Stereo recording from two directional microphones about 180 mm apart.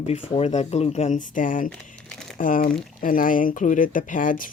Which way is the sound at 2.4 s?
50° left (ahead or behind).